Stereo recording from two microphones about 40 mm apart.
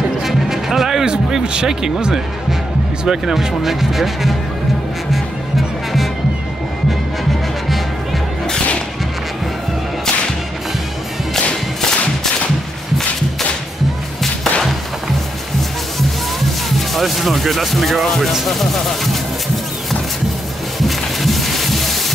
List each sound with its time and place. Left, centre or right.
0.2 s music: centre
1.4 s a sound: right
1.7 s speech: centre
5.1 s music: centre
14.2 s music: centre
16.7 s speech: centre
20.8 s a sound: centre